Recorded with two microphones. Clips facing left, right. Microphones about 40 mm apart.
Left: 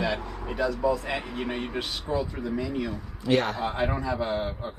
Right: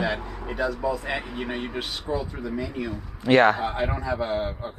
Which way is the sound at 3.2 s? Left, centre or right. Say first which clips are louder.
Right 7 dB; right.